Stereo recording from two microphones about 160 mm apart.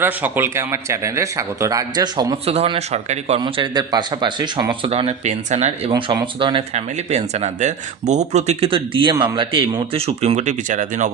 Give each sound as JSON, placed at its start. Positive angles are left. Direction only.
{"t": 0.0, "sound": "speech", "side_deg": -15}
{"t": 2.5, "sound": "speech", "side_deg": -40}
{"t": 3.4, "sound": "speech", "side_deg": -25}
{"t": 5.9, "sound": "speech", "side_deg": -25}
{"t": 6.7, "sound": "speech", "side_deg": -45}